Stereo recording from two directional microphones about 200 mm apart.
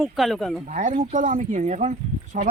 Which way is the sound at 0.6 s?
40° right (ahead or behind).